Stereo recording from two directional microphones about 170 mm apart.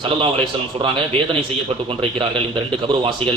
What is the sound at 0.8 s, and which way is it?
A man's voice, 30° right (ahead or behind).